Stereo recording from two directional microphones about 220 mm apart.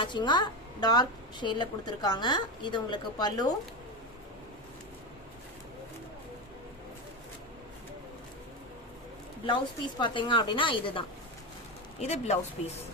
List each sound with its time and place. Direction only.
0.0 s a woman's voice: 20° left (ahead or behind)
10.0 s a woman's voice: 20° left (ahead or behind)